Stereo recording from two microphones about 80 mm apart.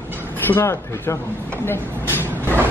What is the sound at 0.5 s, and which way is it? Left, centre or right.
Speech, left.